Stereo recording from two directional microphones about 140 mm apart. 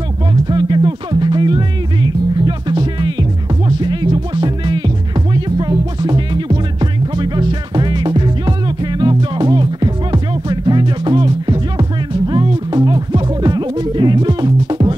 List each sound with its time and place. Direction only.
0.5 s music: 30° right (ahead or behind)